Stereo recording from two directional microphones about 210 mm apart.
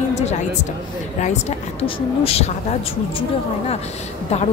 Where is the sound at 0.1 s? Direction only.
30° left (ahead or behind).